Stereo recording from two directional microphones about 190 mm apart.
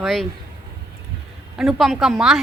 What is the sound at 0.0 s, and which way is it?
Speech, centre (ahead or behind).